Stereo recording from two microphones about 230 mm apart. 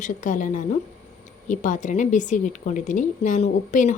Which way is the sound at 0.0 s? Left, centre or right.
Left.